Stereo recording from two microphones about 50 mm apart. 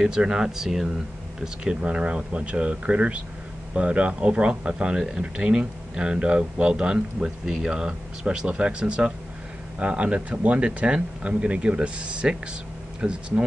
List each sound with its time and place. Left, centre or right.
0.0 s speech: centre